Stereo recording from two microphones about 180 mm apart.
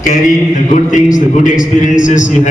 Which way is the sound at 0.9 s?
45° left (ahead or behind).